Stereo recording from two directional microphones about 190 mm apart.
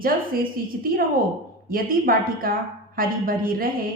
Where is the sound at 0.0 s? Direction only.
50° right (ahead or behind).